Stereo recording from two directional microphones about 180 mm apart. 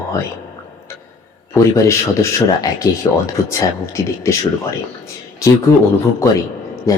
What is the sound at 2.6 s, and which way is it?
Speech, 20° left (ahead or behind).